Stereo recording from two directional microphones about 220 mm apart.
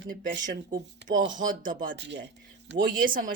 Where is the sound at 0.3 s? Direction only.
45° right (ahead or behind).